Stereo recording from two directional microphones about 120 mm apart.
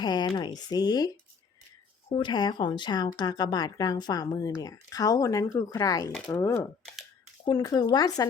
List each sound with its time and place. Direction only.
0.0 s speech: 35° left (ahead or behind)
2.1 s speech: 40° left (ahead or behind)